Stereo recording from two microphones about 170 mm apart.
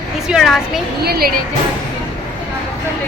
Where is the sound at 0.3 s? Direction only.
Centre (ahead or behind).